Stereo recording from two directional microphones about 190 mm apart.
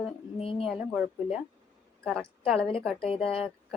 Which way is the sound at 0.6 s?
Centre (ahead or behind).